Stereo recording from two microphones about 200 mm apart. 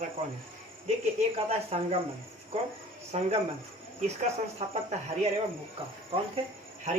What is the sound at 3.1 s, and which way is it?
Speech, 30° right (ahead or behind).